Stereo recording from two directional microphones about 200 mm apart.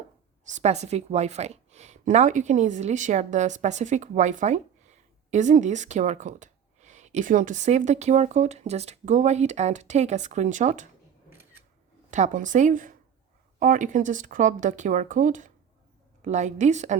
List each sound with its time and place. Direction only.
0.4 s speech: 35° right (ahead or behind)
11.3 s camera: 10° right (ahead or behind)
12.1 s speech: 40° right (ahead or behind)